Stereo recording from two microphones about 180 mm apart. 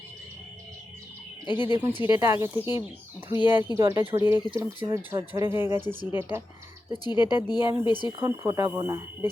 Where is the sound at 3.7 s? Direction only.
15° right (ahead or behind).